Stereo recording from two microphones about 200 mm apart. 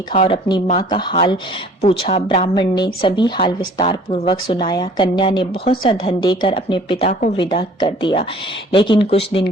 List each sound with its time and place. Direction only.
0.1 s a woman's voice: 30° left (ahead or behind)